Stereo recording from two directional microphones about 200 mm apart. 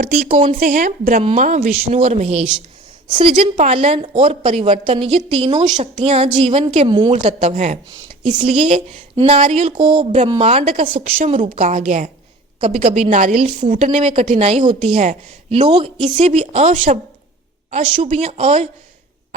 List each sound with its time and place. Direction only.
0.0 s a woman's voice: 40° right (ahead or behind)